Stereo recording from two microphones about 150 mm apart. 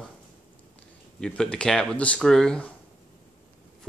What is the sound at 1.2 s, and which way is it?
Speech, 5° left (ahead or behind).